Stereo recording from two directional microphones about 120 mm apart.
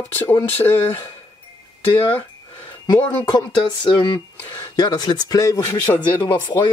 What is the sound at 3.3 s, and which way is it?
Speech, 40° left (ahead or behind).